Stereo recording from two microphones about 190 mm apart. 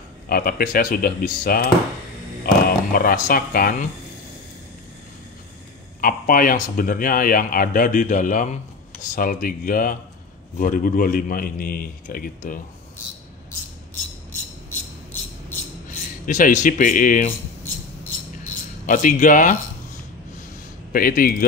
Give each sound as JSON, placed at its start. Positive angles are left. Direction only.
{"t": 0.3, "sound": "a man's voice", "side_deg": 50}
{"t": 5.9, "sound": "a man's voice", "side_deg": 50}
{"t": 16.3, "sound": "a man's voice", "side_deg": 40}
{"t": 18.9, "sound": "a man's voice", "side_deg": 45}
{"t": 20.9, "sound": "a man's voice", "side_deg": 50}